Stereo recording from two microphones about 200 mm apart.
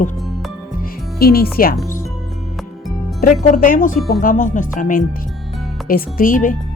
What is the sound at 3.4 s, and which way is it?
Speech, 40° left (ahead or behind).